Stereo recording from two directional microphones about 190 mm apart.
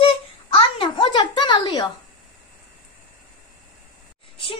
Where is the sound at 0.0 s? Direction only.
30° left (ahead or behind).